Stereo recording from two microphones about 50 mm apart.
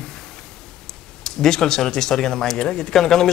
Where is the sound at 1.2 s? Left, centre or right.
Centre.